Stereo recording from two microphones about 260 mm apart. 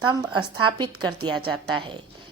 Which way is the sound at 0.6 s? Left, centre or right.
Centre.